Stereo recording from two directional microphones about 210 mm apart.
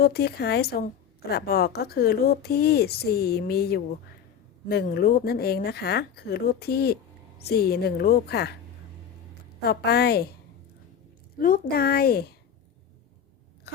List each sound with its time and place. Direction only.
0.0 s speech: 50° left (ahead or behind)
9.6 s speech: 50° left (ahead or behind)
11.3 s speech: 40° left (ahead or behind)